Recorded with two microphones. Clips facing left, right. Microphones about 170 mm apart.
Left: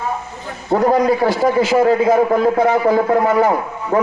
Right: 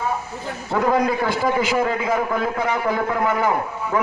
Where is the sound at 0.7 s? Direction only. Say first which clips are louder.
Left 5 dB; 40° left (ahead or behind).